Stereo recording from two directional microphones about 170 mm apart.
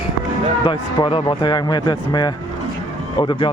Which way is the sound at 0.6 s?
30° left (ahead or behind).